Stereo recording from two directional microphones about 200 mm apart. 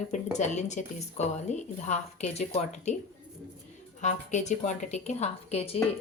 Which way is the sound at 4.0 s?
35° left (ahead or behind).